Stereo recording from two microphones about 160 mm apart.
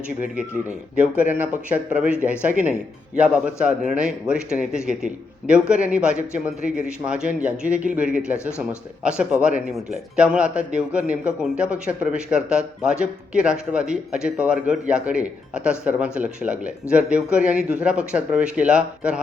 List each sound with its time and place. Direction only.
0.9 s a man's voice: 10° right (ahead or behind)
8.4 s speech: 15° left (ahead or behind)
9.0 s a man's voice: 5° right (ahead or behind)